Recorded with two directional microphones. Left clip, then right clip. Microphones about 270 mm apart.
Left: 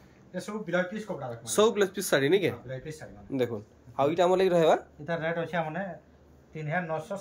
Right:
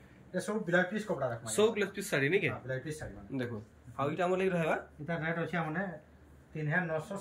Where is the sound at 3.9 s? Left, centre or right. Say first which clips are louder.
Left 8 dB; centre.